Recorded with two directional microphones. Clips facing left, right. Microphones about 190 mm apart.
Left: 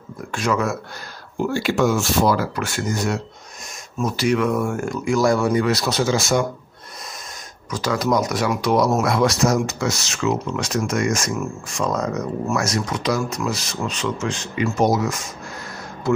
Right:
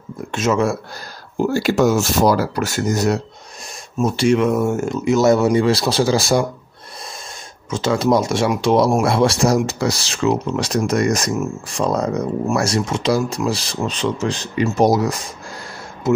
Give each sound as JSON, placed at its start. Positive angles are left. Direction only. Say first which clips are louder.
{"t": 0.3, "sound": "speech", "louder": "right 4 dB", "side_deg": -25}
{"t": 1.4, "sound": "speech", "louder": "right 4 dB", "side_deg": -40}
{"t": 4.0, "sound": "speech", "louder": "right 4 dB", "side_deg": -25}
{"t": 7.7, "sound": "speech", "louder": "right 4 dB", "side_deg": -25}